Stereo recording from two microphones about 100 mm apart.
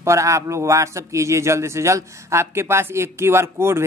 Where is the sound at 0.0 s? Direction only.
30° right (ahead or behind).